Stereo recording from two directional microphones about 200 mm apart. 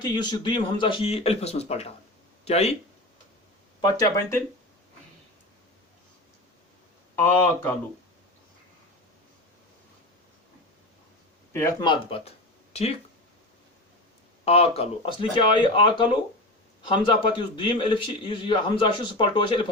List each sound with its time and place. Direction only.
0.0 s a man's voice: 20° left (ahead or behind)
3.8 s a man's voice: 20° left (ahead or behind)
7.2 s speech: 10° left (ahead or behind)
11.5 s a man's voice: 15° left (ahead or behind); by 13.0 s 30° left (ahead or behind)
14.4 s a man's voice: 30° left (ahead or behind)